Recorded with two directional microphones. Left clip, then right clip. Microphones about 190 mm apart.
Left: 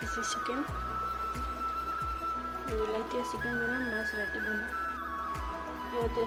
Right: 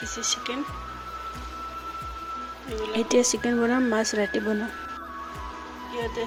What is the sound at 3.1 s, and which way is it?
Speech, 50° right (ahead or behind).